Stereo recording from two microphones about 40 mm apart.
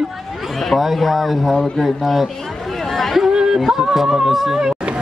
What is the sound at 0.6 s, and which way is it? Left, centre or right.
Speech, centre.